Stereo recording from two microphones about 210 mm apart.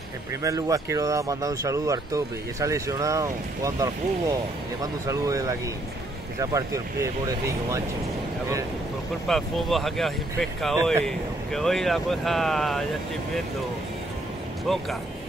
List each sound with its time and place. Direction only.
0.4 s speech: 15° right (ahead or behind)
9.3 s speech: centre (ahead or behind)
14.7 s speech: centre (ahead or behind)